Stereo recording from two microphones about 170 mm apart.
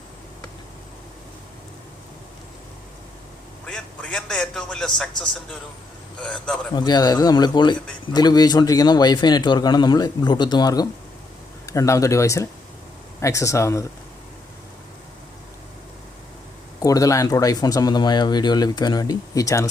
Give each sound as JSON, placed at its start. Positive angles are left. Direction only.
{"t": 3.7, "sound": "a man's voice", "side_deg": 5}
{"t": 6.7, "sound": "speech", "side_deg": 25}
{"t": 16.8, "sound": "speech", "side_deg": 20}